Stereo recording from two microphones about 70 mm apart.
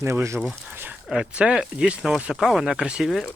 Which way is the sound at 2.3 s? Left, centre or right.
Centre.